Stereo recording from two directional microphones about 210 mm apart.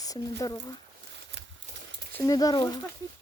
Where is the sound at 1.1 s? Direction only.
55° right (ahead or behind).